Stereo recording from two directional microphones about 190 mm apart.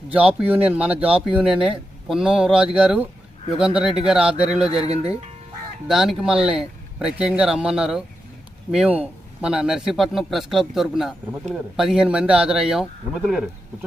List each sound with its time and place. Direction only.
0.1 s a man's voice: 5° right (ahead or behind)
4.7 s speech: 30° right (ahead or behind)
5.9 s a man's voice: centre (ahead or behind)